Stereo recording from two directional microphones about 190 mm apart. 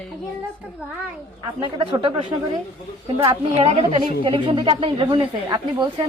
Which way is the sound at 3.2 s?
30° right (ahead or behind).